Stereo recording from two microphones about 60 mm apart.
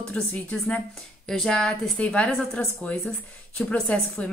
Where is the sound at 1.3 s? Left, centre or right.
Centre.